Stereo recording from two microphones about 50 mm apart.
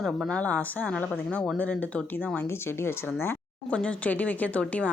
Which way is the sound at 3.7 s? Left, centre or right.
Left.